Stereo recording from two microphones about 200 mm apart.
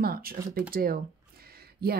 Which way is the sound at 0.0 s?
50° right (ahead or behind).